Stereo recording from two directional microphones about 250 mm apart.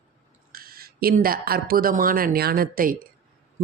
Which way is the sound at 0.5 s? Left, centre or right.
Right.